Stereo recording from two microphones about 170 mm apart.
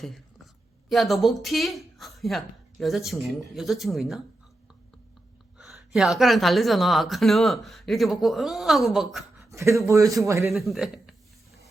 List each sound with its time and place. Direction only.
0.9 s a woman's voice: centre (ahead or behind)
5.5 s a woman's voice: centre (ahead or behind)
9.4 s a man's voice: 15° right (ahead or behind)
10.5 s a woman's voice: centre (ahead or behind)